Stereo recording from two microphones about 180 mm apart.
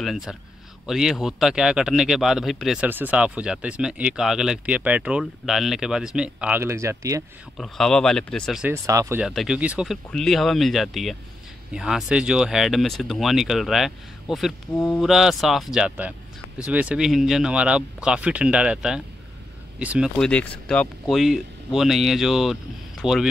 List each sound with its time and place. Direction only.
0.0 s speech: centre (ahead or behind); by 7.2 s 15° right (ahead or behind)
7.5 s speech: centre (ahead or behind)
8.6 s speech: 15° right (ahead or behind)
9.2 s speech: centre (ahead or behind)
20.2 s speech: 5° left (ahead or behind)